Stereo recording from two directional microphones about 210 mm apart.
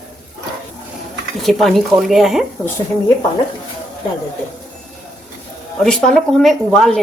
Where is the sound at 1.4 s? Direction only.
Centre (ahead or behind).